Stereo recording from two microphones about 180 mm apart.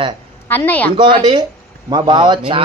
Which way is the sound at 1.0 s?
30° right (ahead or behind).